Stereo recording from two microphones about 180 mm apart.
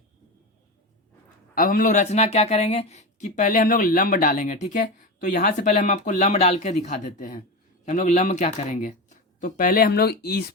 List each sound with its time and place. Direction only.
1.5 s speech: 50° left (ahead or behind)